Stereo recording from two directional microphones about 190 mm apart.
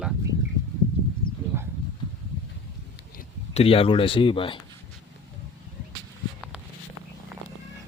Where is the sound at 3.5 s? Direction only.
30° left (ahead or behind).